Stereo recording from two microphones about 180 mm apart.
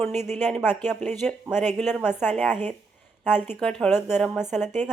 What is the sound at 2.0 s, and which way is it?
A woman's voice, 10° left (ahead or behind).